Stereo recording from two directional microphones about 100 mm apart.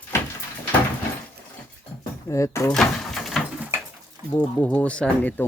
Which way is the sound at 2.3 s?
30° left (ahead or behind).